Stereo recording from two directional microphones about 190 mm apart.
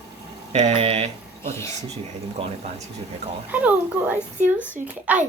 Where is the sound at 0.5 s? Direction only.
35° right (ahead or behind).